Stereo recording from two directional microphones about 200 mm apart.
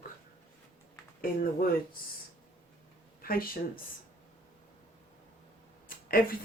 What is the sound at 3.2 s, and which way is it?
Speech, 45° left (ahead or behind).